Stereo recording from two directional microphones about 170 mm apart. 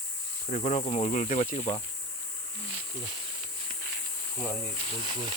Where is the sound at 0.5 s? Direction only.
45° left (ahead or behind).